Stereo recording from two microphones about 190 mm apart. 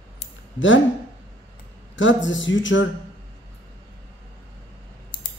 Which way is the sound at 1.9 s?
80° left.